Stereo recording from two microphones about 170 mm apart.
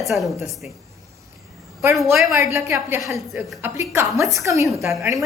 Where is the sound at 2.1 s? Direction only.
Centre (ahead or behind).